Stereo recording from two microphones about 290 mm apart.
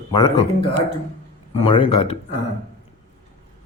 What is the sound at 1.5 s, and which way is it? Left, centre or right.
Speech, centre.